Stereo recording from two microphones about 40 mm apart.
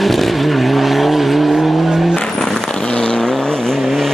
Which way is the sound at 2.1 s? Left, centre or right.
Centre.